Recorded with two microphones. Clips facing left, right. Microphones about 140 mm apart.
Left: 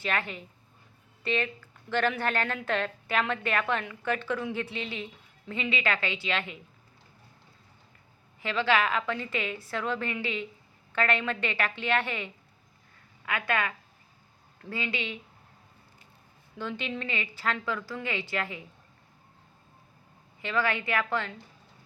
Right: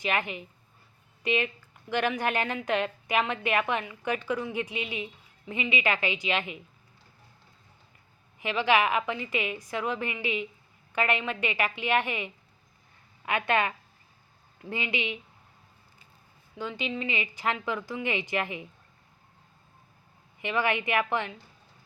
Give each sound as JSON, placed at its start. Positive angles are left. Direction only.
{"t": 0.0, "sound": "a woman's voice", "side_deg": -15}
{"t": 8.4, "sound": "a woman's voice", "side_deg": -15}
{"t": 16.6, "sound": "a woman's voice", "side_deg": -10}
{"t": 20.4, "sound": "a woman's voice", "side_deg": -15}